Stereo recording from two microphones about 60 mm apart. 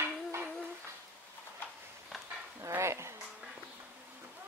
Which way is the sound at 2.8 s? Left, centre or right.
Right.